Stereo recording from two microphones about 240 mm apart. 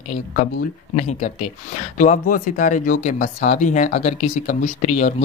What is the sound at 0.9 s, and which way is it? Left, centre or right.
Speech, left.